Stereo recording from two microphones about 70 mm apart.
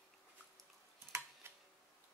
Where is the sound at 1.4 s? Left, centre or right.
Right.